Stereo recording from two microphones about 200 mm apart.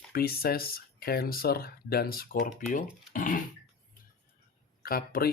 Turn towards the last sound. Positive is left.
turn(degrees=45)  # may be behind; listen again after turning